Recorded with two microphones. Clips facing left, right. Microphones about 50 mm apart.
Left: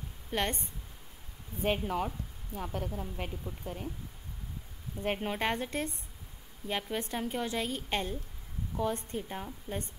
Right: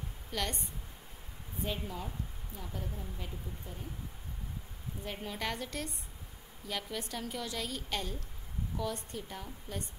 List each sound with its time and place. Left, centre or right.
0.3 s a woman's voice: left
1.6 s speech: left
5.0 s a woman's voice: left